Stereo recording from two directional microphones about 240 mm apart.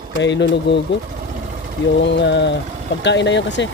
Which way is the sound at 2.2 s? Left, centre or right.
Left.